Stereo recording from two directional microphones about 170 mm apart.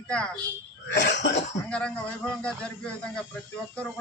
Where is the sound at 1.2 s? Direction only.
90° left.